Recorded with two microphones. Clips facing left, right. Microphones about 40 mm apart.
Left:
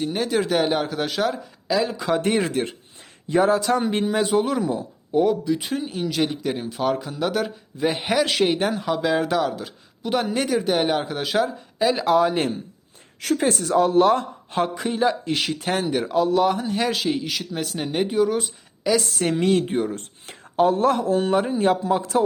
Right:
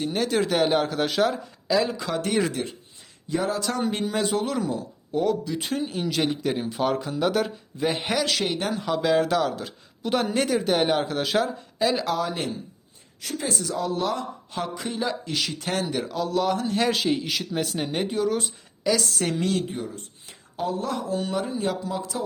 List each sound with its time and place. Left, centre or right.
0.0 s speech: centre
2.0 s speech: left
3.6 s a man's voice: centre
8.2 s a woman's voice: left
8.7 s speech: centre
12.0 s a woman's voice: left
13.1 s speech: left
14.8 s a woman's voice: centre
15.2 s speech: left
15.6 s speech: centre
18.9 s a woman's voice: left
19.6 s speech: left